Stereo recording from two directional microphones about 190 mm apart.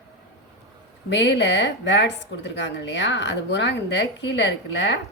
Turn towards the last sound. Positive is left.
turn(degrees=65)  # may be behind; listen again after turning